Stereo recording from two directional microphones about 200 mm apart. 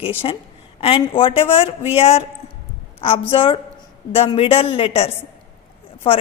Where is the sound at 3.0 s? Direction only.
30° left (ahead or behind).